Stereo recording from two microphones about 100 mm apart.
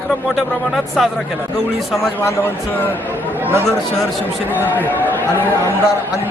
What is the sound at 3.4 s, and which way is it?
Speech, 25° right (ahead or behind).